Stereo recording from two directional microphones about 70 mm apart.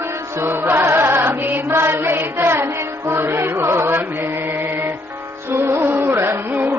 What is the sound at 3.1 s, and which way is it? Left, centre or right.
Music, right.